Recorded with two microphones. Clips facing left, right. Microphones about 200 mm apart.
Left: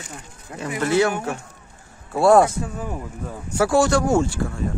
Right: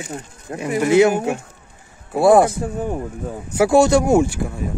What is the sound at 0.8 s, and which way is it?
Speech, 15° right (ahead or behind).